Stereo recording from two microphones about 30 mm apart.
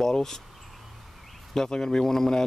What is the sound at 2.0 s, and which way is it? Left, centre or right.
Speech, centre.